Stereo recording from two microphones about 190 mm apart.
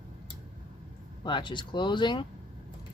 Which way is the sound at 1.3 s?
25° left (ahead or behind).